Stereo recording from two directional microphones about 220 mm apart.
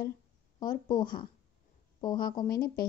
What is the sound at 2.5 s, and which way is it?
Speech, 45° left (ahead or behind).